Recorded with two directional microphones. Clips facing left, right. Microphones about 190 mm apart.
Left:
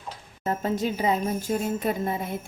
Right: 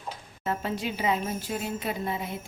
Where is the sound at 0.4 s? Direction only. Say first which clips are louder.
Left 4 dB; 40° left (ahead or behind).